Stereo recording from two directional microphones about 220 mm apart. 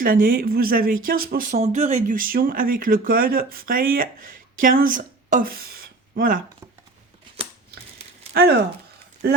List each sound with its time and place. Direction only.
0.0 s speech: 40° right (ahead or behind)
8.3 s speech: 45° right (ahead or behind)